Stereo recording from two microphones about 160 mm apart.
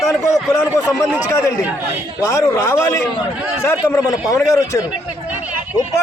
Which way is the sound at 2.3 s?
15° left (ahead or behind).